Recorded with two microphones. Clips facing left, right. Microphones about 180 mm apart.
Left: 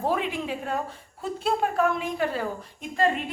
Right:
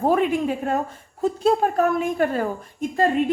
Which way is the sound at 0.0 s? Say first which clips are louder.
Right 7 dB; 50° right (ahead or behind).